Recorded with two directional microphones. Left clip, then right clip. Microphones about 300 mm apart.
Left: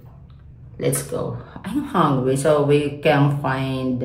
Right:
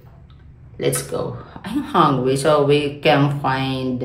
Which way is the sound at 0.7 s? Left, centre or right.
Centre.